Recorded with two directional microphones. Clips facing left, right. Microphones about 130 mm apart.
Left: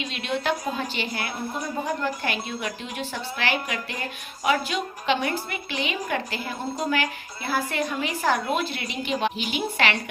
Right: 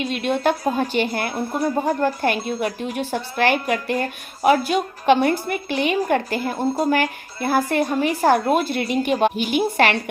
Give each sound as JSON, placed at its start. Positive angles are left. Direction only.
{"t": 0.0, "sound": "a woman's voice", "side_deg": -45}